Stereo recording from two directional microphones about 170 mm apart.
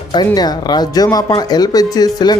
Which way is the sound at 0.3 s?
25° left (ahead or behind).